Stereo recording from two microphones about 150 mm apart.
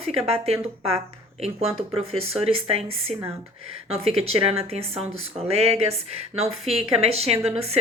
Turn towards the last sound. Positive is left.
turn(degrees=-45)  # may be behind; listen again after turning